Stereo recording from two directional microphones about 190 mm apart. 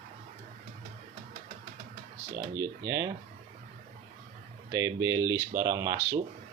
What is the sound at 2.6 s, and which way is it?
Speech, 20° right (ahead or behind).